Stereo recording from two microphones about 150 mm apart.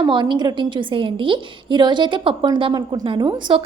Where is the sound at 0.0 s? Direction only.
30° right (ahead or behind).